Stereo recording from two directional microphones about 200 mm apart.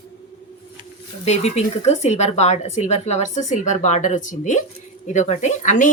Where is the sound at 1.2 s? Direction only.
30° left (ahead or behind).